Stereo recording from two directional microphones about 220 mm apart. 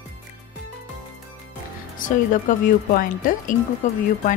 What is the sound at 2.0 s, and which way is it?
Speech, 35° left (ahead or behind).